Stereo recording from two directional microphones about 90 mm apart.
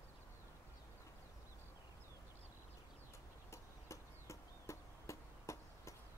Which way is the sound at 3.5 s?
35° left (ahead or behind).